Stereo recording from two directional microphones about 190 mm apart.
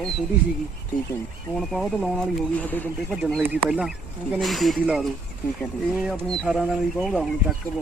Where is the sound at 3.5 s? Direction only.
5° right (ahead or behind).